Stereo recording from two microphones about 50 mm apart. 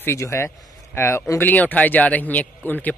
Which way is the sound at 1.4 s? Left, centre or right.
Left.